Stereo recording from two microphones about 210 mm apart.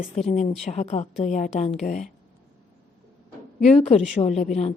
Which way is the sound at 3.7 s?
30° left (ahead or behind).